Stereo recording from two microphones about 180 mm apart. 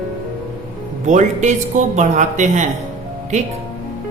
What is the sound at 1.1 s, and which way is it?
Speech, 40° right (ahead or behind).